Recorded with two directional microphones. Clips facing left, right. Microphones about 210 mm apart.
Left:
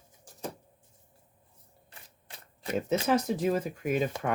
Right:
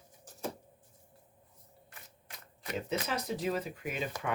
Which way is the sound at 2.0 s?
30° left (ahead or behind).